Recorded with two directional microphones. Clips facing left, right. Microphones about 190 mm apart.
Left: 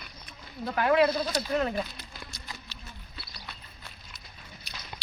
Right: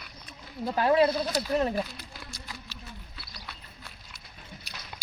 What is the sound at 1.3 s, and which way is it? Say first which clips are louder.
Speech: right 1 dB; 10° right (ahead or behind).